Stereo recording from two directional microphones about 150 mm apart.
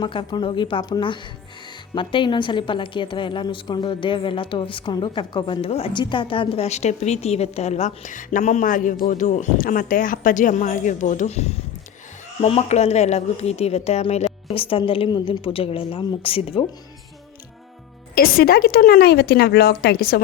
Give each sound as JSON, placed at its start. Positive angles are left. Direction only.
{"t": 0.0, "sound": "a woman's voice", "side_deg": 30}
{"t": 18.1, "sound": "a woman's voice", "side_deg": 75}